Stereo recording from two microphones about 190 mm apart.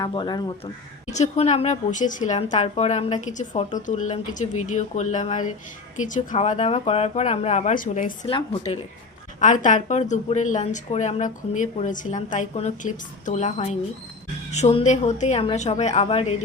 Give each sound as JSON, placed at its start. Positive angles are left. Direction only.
{"t": 0.0, "sound": "speech", "side_deg": 25}
{"t": 1.1, "sound": "speech", "side_deg": 35}
{"t": 8.3, "sound": "speech", "side_deg": 25}
{"t": 9.4, "sound": "speech", "side_deg": 40}